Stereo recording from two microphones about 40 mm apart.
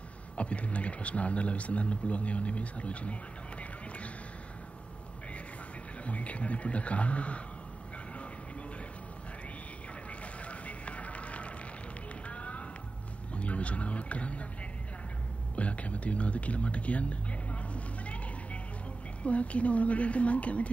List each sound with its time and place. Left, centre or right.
0.4 s speech: left
6.0 s speech: left
10.4 s music: left
12.3 s a sound: left
15.5 s a sound: left
19.2 s speech: left